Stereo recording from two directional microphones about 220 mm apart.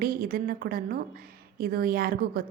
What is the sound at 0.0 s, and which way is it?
A woman's voice, 40° right (ahead or behind).